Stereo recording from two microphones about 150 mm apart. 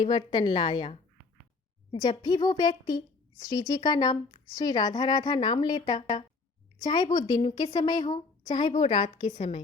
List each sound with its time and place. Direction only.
0.0 s a woman's voice: 30° left (ahead or behind)
1.9 s a woman's voice: 30° left (ahead or behind)